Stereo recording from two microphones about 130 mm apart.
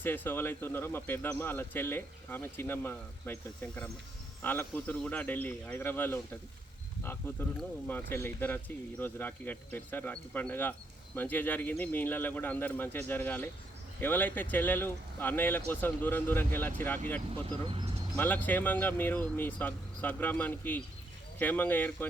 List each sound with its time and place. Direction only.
0.0 s speech: 15° left (ahead or behind)
17.4 s speech: 45° right (ahead or behind)
18.2 s speech: 15° left (ahead or behind)